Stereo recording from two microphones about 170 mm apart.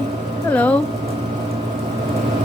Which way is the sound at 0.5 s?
10° left (ahead or behind).